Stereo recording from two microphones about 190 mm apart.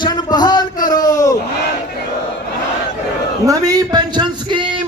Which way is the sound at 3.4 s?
20° right (ahead or behind).